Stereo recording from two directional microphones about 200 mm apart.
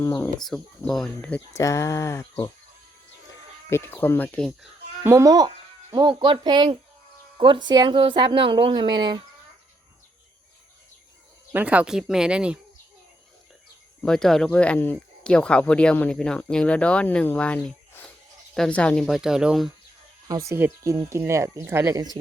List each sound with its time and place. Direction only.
0.0 s speech: 15° left (ahead or behind)
0.3 s speech: centre (ahead or behind)
1.5 s speech: 15° left (ahead or behind)
3.7 s speech: 10° left (ahead or behind)
5.0 s speech: 15° right (ahead or behind)
11.5 s speech: 5° right (ahead or behind)
14.0 s speech: 5° left (ahead or behind)
20.2 s speech: 15° right (ahead or behind)